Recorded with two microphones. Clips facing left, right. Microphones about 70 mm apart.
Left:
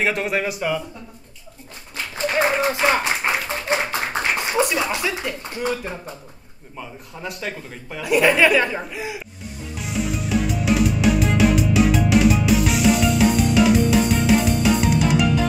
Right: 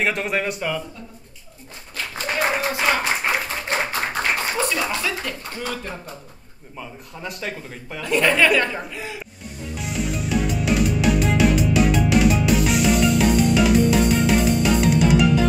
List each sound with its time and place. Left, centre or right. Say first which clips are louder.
0.0 s speech: left 1 dB; centre
2.3 s speech: left 3 dB; left
3.6 s clapping: left 1 dB; centre
6.8 s speech: left 1 dB; centre
9.8 s music: left 1 dB; centre